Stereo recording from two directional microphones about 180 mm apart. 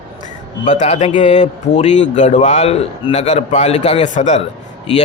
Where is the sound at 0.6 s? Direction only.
40° left (ahead or behind).